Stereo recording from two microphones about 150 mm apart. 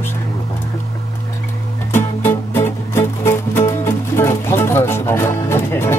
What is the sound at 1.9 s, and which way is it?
Music, 15° left (ahead or behind).